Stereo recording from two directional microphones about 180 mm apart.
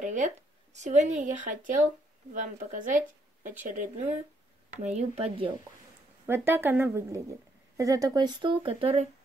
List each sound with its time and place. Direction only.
0.0 s a sound: 45° right (ahead or behind)
0.7 s a woman's voice: 40° right (ahead or behind)
6.2 s a woman's voice: 15° right (ahead or behind); by 9.0 s 30° right (ahead or behind)